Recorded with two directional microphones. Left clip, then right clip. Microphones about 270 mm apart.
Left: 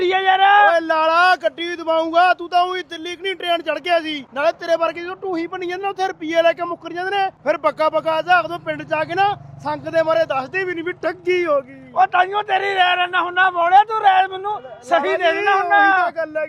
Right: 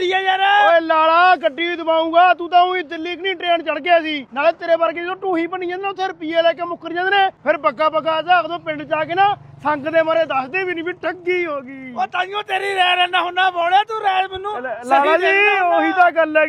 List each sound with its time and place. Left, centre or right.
0.0 s a sound: left
0.7 s speech: right
4.6 s speech: right
5.0 s speech: right
6.9 s speech: right
7.4 s speech: right; by 11.6 s centre
11.9 s a man's voice: left
16.0 s speech: right